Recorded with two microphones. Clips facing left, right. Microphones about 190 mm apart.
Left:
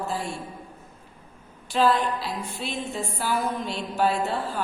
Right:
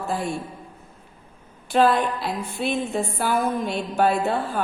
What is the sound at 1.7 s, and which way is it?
Music, 55° right (ahead or behind).